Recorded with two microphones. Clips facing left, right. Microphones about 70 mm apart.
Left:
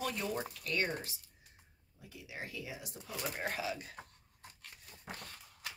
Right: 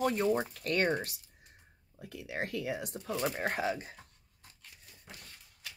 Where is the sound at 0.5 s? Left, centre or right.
Right.